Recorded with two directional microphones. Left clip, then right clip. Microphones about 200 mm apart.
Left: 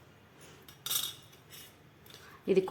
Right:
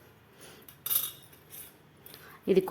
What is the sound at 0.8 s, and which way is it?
Cutlery, centre (ahead or behind).